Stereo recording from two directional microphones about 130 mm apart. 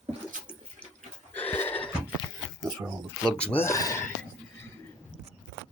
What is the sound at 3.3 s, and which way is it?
Speech, 10° left (ahead or behind).